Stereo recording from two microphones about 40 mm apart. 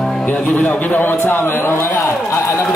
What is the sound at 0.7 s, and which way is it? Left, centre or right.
Speech, left.